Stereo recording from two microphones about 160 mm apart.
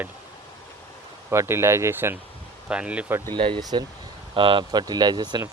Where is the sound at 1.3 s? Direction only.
15° right (ahead or behind).